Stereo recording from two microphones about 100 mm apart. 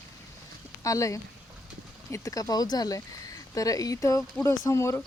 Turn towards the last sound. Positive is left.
turn(degrees=30)  # may be behind; listen again after turning